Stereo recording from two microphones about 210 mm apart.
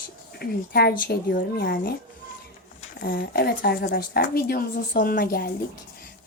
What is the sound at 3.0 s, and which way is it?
A woman's voice, 50° left (ahead or behind).